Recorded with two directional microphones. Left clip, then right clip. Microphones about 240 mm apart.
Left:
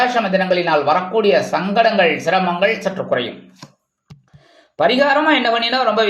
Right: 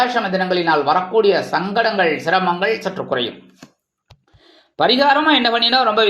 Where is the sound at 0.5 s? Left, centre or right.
Centre.